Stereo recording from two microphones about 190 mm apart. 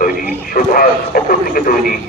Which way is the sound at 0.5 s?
50° left (ahead or behind).